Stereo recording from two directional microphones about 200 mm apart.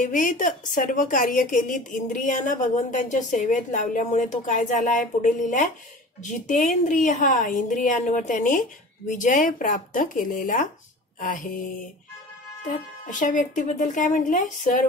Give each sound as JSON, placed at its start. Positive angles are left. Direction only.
{"t": 0.0, "sound": "a woman's voice", "side_deg": 40}
{"t": 11.1, "sound": "a sound", "side_deg": 45}
{"t": 12.6, "sound": "a woman's voice", "side_deg": 40}